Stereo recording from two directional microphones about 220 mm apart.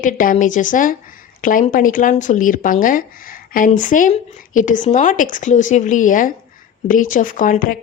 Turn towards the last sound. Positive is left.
turn(degrees=40)  # may be behind; listen again after turning